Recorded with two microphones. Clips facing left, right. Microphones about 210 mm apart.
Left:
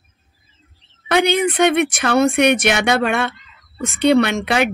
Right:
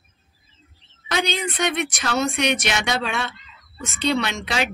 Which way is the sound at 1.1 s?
60° left (ahead or behind).